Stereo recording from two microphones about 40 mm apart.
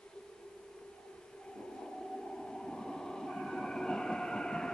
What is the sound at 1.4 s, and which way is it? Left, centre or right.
Train, centre.